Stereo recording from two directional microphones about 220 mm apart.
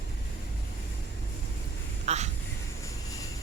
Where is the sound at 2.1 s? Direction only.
30° right (ahead or behind).